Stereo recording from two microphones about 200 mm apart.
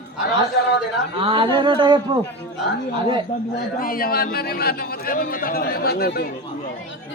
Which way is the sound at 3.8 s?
45° left (ahead or behind).